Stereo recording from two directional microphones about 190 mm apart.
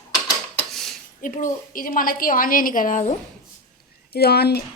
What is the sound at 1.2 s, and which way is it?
Speech, 45° left (ahead or behind).